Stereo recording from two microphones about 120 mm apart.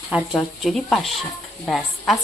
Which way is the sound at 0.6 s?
Centre (ahead or behind).